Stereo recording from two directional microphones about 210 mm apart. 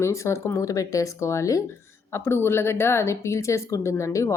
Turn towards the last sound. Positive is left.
turn(degrees=15)  # may be behind; listen again after turning